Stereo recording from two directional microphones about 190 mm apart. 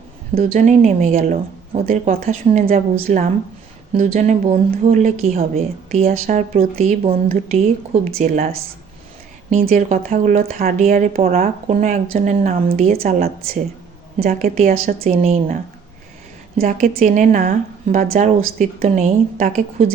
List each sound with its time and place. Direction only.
0.3 s a woman's voice: 40° right (ahead or behind)
8.2 s speech: 40° right (ahead or behind)
9.5 s speech: 40° right (ahead or behind)
12.9 s a woman's voice: 50° right (ahead or behind)
14.9 s speech: 35° right (ahead or behind)
16.6 s speech: 45° right (ahead or behind)